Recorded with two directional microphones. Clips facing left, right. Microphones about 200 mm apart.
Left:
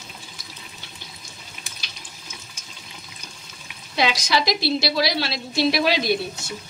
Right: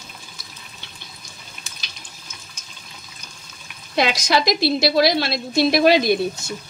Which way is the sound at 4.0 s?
50° right (ahead or behind).